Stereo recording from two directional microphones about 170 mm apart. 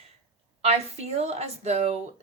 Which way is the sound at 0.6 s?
35° right (ahead or behind).